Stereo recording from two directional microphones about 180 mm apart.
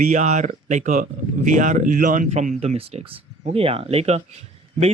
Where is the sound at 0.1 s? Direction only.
40° right (ahead or behind).